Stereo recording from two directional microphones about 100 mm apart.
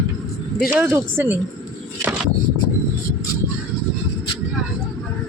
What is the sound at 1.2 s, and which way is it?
Speech, 25° right (ahead or behind).